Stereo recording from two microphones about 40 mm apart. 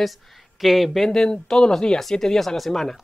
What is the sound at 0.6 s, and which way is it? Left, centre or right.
Speech, centre.